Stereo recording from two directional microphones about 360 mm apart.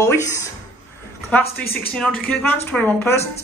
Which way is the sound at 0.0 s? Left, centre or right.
Centre.